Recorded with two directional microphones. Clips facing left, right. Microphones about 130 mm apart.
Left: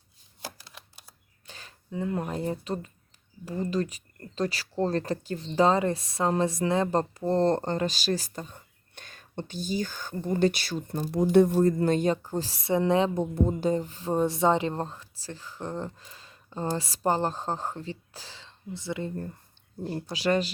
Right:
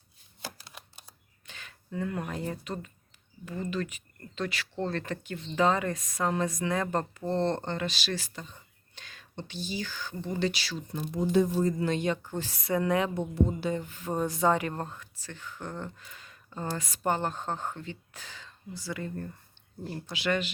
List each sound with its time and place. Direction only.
0.7 s camera: 5° right (ahead or behind)
1.5 s a sound: 35° left (ahead or behind)
1.9 s speech: 20° left (ahead or behind); by 11.1 s 45° left (ahead or behind)
11.1 s speech: 65° left (ahead or behind); by 13.1 s 25° left (ahead or behind)
13.1 s speech: 40° left (ahead or behind)